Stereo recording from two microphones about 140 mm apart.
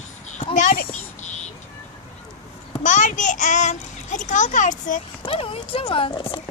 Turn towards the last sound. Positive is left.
turn(degrees=35)  # may be behind; listen again after turning